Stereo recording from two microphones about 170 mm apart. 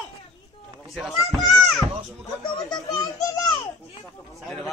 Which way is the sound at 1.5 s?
Centre (ahead or behind).